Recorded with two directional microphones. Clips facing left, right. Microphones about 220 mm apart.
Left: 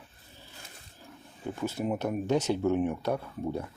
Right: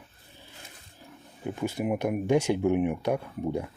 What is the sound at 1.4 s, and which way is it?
Speech, 15° right (ahead or behind).